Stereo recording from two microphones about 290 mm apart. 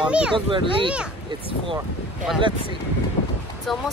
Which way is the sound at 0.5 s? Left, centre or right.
Centre.